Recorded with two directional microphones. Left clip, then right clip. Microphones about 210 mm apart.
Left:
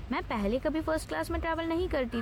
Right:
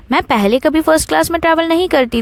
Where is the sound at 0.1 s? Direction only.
50° right (ahead or behind).